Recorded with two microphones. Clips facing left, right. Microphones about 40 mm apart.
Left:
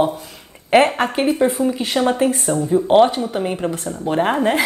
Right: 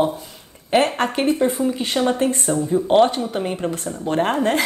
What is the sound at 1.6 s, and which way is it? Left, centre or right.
Speech, centre.